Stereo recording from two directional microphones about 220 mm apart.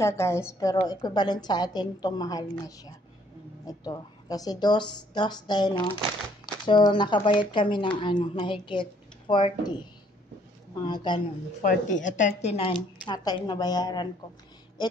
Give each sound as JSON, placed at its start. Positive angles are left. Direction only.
{"t": 0.0, "sound": "a woman's voice", "side_deg": 10}
{"t": 10.9, "sound": "speech", "side_deg": 20}
{"t": 11.6, "sound": "speech", "side_deg": 35}